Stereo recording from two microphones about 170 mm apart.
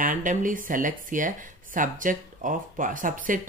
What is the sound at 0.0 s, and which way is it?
Speech, 50° right (ahead or behind).